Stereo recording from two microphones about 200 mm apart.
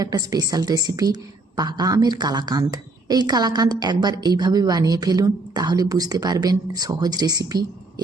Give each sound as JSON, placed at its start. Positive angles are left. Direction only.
{"t": 0.0, "sound": "a woman's voice", "side_deg": -15}